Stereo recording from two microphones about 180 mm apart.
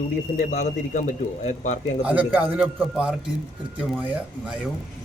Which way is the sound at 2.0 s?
10° right (ahead or behind).